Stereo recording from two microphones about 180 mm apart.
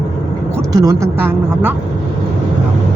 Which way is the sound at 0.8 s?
15° right (ahead or behind).